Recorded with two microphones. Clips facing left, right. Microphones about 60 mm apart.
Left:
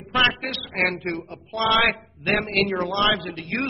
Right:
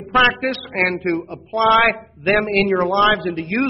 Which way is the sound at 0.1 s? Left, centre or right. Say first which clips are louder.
Right 6 dB; right.